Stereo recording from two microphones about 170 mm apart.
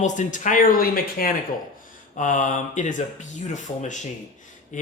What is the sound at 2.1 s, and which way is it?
Speech, 45° left (ahead or behind).